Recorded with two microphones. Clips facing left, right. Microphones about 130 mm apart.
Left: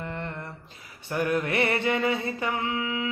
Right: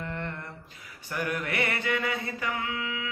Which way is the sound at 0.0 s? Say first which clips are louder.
Left 1 dB; 25° left (ahead or behind).